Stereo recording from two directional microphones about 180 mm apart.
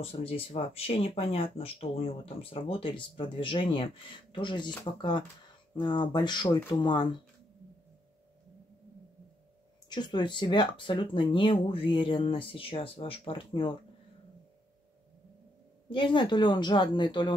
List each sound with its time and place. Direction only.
0.0 s speech: 30° left (ahead or behind)
9.8 s speech: 25° left (ahead or behind)
15.9 s speech: 25° left (ahead or behind)